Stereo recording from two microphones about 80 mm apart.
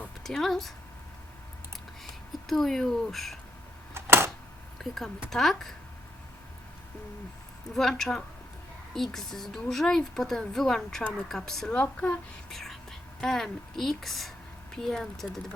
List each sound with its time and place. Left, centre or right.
0.2 s speech: centre
2.5 s speech: centre
3.9 s a sound: right
4.8 s speech: centre
7.8 s speech: centre
11.7 s speech: centre
12.5 s speech: centre